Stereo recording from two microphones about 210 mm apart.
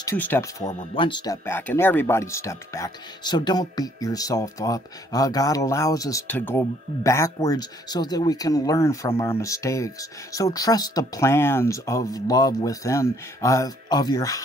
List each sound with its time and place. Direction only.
0.0 s speech: 10° left (ahead or behind)
0.7 s speech: 30° left (ahead or behind)